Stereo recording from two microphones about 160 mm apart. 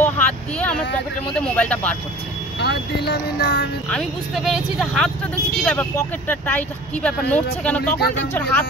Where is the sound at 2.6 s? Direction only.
90° left.